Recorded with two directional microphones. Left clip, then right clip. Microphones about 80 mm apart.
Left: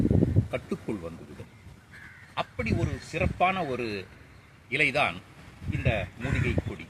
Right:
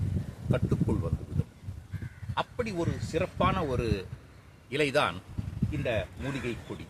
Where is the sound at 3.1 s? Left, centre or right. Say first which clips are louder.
Left 3 dB; right.